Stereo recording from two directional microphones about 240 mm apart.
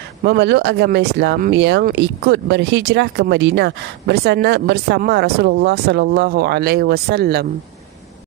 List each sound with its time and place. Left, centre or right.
0.2 s speech: right